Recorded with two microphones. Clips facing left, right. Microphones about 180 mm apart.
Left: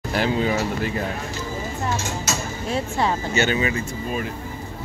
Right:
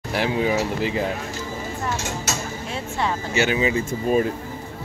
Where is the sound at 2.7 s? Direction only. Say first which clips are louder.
Left 4 dB; 35° left (ahead or behind).